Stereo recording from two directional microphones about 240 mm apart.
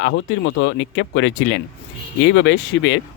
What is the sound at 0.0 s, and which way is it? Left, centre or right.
Speech, left.